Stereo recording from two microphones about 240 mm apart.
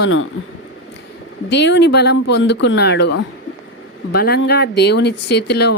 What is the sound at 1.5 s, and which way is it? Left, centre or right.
Speech, left.